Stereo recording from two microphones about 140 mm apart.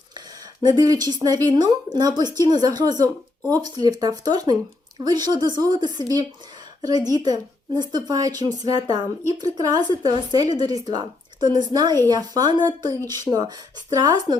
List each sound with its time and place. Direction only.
0.6 s speech: 30° right (ahead or behind)